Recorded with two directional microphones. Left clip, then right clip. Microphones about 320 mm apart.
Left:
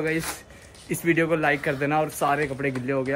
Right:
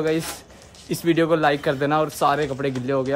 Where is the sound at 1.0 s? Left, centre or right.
Centre.